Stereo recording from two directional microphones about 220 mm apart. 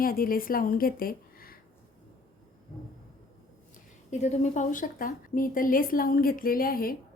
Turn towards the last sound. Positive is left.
turn(degrees=40)  # may be behind; listen again after turning